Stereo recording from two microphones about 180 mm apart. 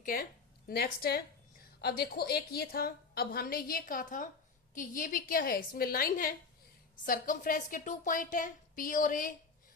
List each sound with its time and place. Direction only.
0.0 s a woman's voice: 50° left (ahead or behind)